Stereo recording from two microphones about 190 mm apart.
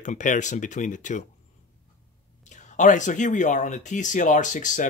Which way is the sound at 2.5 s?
40° left (ahead or behind).